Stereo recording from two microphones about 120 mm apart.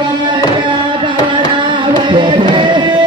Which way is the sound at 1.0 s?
40° right (ahead or behind).